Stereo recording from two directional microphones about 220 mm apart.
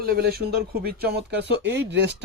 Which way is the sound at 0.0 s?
45° right (ahead or behind).